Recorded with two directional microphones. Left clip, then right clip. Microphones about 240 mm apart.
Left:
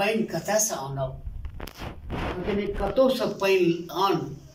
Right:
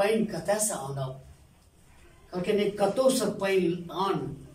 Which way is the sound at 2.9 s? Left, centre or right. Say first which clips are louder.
Left 3 dB; centre.